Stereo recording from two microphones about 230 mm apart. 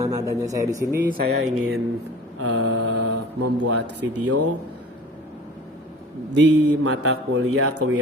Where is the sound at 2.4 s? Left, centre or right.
Right.